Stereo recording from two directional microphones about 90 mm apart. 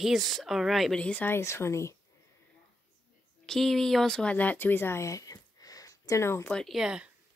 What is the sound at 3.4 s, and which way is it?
Speech, 5° left (ahead or behind).